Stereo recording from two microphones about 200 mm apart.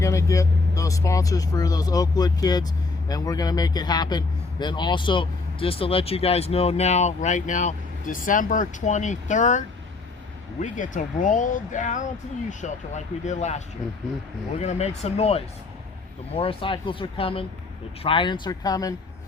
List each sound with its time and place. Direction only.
0.0 s vehicle: 15° left (ahead or behind)
0.8 s a man's voice: 15° left (ahead or behind); by 13.6 s 35° left (ahead or behind)
14.6 s a man's voice: 35° left (ahead or behind); by 18.9 s 20° left (ahead or behind)